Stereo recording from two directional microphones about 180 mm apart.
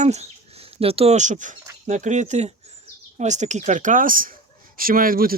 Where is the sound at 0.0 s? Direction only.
35° right (ahead or behind).